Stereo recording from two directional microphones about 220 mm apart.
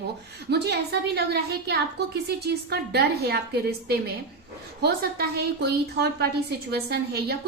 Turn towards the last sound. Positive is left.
turn(degrees=-45)  # may be behind; listen again after turning